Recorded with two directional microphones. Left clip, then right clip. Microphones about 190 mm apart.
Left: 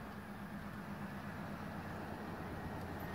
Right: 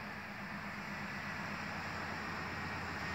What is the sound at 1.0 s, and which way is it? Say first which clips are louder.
Vehicle: right 6 dB; 40° left (ahead or behind).